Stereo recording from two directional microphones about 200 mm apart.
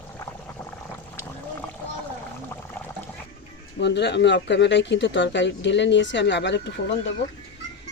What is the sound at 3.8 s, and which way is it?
Speech, 60° left (ahead or behind).